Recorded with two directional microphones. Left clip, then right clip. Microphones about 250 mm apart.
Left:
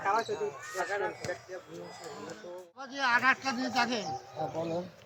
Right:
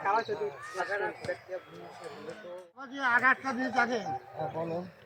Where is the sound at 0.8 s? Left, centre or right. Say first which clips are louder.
Even; right.